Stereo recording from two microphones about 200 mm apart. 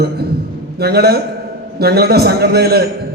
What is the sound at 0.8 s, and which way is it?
A man's voice, 55° right (ahead or behind).